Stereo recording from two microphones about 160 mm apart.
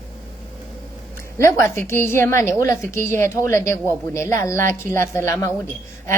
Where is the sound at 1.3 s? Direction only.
20° left (ahead or behind).